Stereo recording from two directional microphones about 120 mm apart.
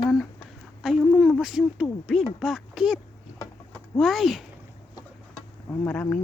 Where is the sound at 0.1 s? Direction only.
5° left (ahead or behind).